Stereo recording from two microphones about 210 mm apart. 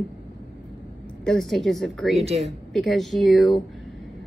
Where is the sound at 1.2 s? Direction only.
Centre (ahead or behind).